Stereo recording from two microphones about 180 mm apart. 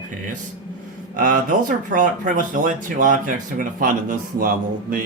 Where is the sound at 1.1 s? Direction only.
50° right (ahead or behind).